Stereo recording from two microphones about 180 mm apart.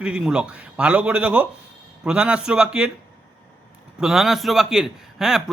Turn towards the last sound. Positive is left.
turn(degrees=0)  # may be behind; listen again after turning